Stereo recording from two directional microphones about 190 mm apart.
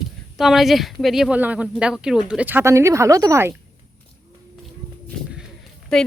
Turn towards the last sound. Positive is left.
turn(degrees=5)  # may be behind; listen again after turning